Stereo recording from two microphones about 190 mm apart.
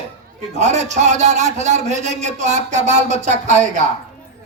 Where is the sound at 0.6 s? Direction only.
35° right (ahead or behind).